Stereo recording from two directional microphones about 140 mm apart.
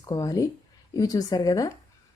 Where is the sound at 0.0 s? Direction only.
25° left (ahead or behind).